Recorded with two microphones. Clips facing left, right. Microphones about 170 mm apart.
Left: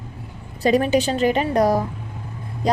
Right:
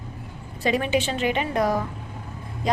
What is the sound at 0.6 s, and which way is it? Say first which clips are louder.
A woman's voice: left 5 dB; 40° left (ahead or behind).